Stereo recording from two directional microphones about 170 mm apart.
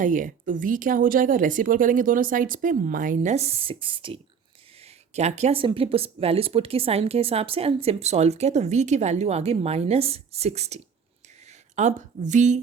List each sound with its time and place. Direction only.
0.0 s speech: 50° right (ahead or behind); by 4.2 s 30° right (ahead or behind)
4.8 s speech: 40° right (ahead or behind)
11.8 s speech: 45° right (ahead or behind)